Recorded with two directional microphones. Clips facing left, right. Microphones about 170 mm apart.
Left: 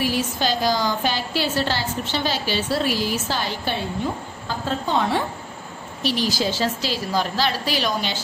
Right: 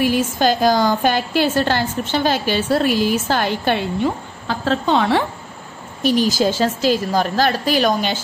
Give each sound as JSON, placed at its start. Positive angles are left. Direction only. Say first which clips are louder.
{"t": 0.0, "sound": "a woman's voice", "louder": "right 6 dB", "side_deg": -50}
{"t": 6.0, "sound": "a woman's voice", "louder": "right 7 dB", "side_deg": -45}